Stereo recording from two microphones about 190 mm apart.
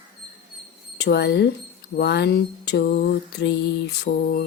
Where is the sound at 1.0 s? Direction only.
60° left (ahead or behind).